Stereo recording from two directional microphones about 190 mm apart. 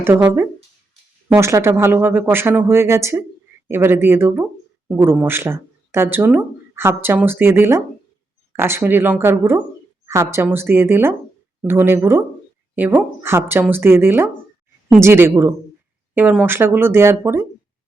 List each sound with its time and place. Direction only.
0.0 s speech: 10° right (ahead or behind)